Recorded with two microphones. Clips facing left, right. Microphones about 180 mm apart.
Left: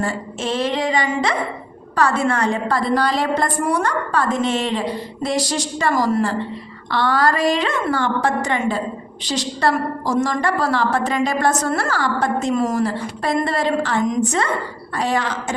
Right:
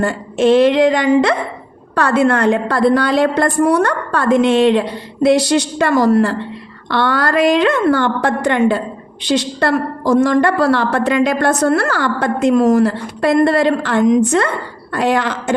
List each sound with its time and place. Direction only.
0.0 s a woman's voice: 60° right (ahead or behind)